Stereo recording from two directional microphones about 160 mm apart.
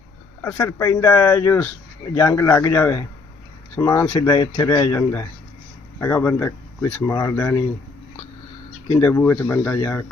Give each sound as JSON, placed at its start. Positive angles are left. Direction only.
{"t": 0.4, "sound": "speech", "side_deg": 15}
{"t": 8.9, "sound": "speech", "side_deg": 15}